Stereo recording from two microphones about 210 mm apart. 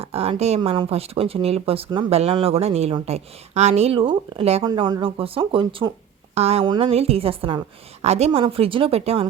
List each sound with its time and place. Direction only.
0.0 s speech: 30° right (ahead or behind)